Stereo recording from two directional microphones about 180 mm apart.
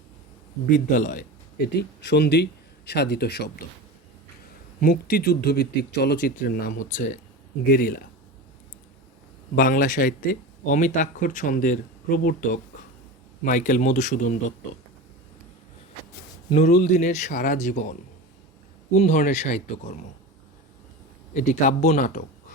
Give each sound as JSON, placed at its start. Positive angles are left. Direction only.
{"t": 0.7, "sound": "speech", "side_deg": 45}
{"t": 1.6, "sound": "speech", "side_deg": 65}
{"t": 4.8, "sound": "speech", "side_deg": 55}
{"t": 9.6, "sound": "speech", "side_deg": 50}
{"t": 16.6, "sound": "speech", "side_deg": 40}
{"t": 21.3, "sound": "speech", "side_deg": 45}